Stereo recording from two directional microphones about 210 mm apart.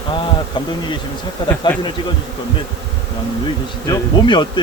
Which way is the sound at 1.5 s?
15° left (ahead or behind).